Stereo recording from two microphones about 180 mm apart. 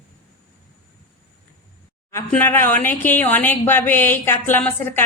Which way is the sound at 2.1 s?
10° left (ahead or behind).